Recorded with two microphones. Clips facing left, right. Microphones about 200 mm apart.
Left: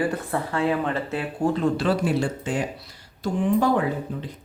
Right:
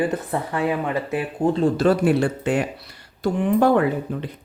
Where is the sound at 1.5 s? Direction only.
30° right (ahead or behind).